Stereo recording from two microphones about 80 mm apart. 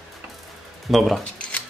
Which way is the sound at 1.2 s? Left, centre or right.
Centre.